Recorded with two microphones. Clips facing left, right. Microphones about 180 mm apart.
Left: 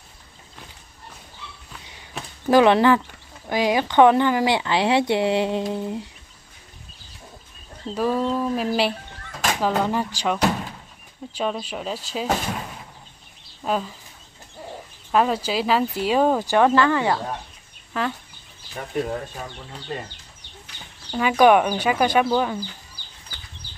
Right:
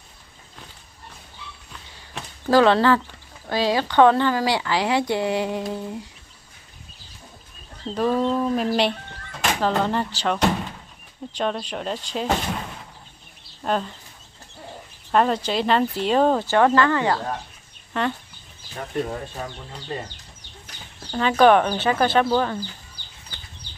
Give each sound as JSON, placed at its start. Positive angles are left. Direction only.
{"t": 2.4, "sound": "speech", "side_deg": 15}
{"t": 7.9, "sound": "speech", "side_deg": 5}
{"t": 13.7, "sound": "speech", "side_deg": 5}
{"t": 15.0, "sound": "speech", "side_deg": 5}
{"t": 17.9, "sound": "speech", "side_deg": 0}
{"t": 21.1, "sound": "speech", "side_deg": 10}